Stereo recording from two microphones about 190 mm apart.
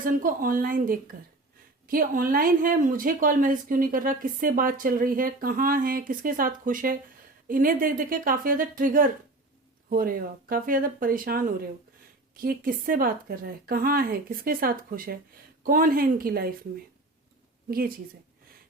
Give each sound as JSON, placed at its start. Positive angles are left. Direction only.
{"t": 0.0, "sound": "speech", "side_deg": -45}
{"t": 17.7, "sound": "speech", "side_deg": -50}